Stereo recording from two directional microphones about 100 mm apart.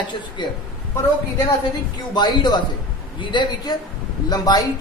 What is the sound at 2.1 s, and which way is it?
A woman's voice, 45° left (ahead or behind).